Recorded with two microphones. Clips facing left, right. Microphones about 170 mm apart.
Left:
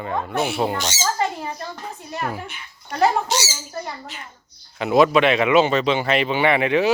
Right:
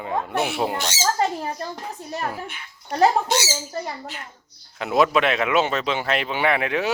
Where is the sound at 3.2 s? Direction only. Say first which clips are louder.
Right 1 dB; 55° right (ahead or behind).